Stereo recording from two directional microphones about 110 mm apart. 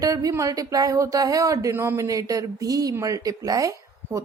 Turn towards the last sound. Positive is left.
turn(degrees=-30)  # may be behind; listen again after turning